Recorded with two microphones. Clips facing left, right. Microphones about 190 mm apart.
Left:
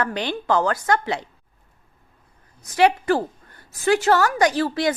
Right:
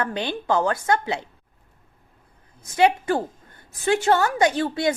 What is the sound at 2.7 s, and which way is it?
Speech, 25° right (ahead or behind).